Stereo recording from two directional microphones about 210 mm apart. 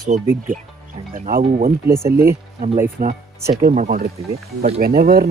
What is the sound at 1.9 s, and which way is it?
Speech, 10° right (ahead or behind).